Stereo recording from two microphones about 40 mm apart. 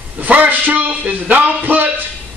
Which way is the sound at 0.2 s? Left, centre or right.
Right.